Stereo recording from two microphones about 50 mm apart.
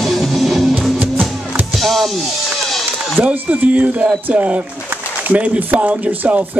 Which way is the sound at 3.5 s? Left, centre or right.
Right.